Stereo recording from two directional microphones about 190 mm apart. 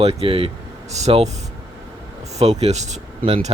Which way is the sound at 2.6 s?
35° right (ahead or behind).